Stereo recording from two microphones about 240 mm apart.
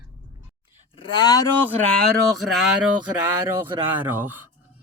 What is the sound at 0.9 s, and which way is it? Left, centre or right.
Speech, left.